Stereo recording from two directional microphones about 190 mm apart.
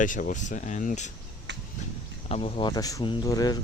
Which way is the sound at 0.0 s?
45° left (ahead or behind).